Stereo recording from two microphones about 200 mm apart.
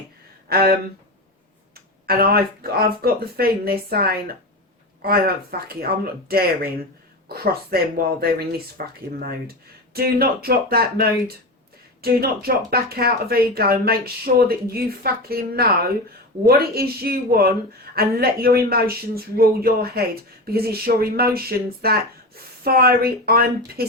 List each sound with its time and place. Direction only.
0.4 s speech: 50° right (ahead or behind)
2.0 s speech: 50° right (ahead or behind)